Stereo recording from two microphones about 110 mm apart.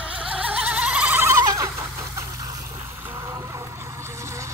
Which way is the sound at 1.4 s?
30° right (ahead or behind).